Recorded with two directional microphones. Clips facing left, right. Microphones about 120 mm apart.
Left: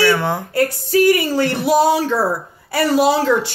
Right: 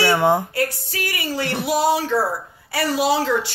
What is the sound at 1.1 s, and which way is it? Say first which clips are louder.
A woman's voice: left 9 dB; 45° left (ahead or behind).